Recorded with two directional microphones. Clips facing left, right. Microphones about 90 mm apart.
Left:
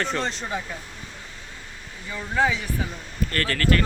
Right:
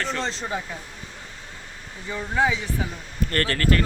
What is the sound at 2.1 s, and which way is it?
Speech, 15° right (ahead or behind).